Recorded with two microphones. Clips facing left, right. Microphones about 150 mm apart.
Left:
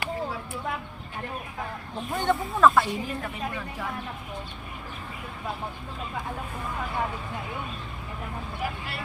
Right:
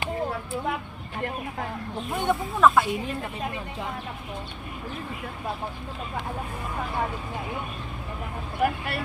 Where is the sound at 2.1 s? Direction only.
5° right (ahead or behind).